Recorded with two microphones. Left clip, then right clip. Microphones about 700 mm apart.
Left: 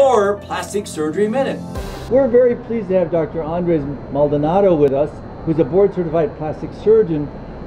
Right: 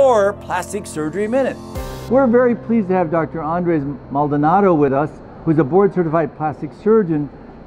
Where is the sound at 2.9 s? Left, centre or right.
Right.